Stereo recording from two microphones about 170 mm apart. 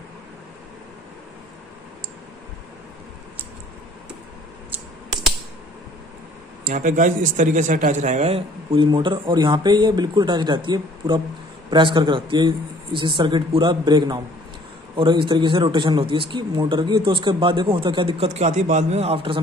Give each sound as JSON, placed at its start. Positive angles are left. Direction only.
{"t": 6.7, "sound": "a man's voice", "side_deg": -50}